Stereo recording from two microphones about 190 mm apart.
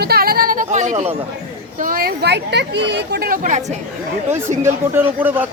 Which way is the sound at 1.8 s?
50° right (ahead or behind).